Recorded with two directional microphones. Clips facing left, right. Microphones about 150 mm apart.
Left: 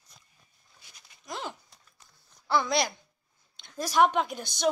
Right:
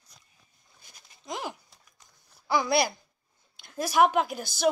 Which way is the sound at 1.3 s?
10° right (ahead or behind).